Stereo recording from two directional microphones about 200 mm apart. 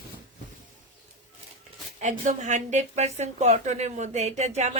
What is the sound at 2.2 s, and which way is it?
A woman's voice, 40° right (ahead or behind).